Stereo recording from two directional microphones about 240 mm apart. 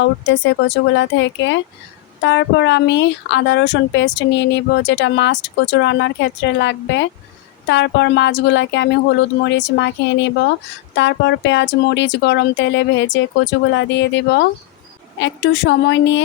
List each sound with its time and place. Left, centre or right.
0.3 s speech: left